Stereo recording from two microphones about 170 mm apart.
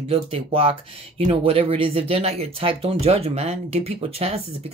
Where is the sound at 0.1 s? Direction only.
35° right (ahead or behind).